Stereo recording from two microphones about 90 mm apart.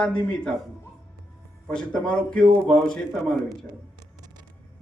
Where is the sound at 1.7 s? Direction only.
10° left (ahead or behind).